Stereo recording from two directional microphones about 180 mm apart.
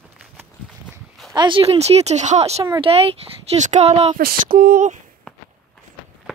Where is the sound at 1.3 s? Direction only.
25° right (ahead or behind).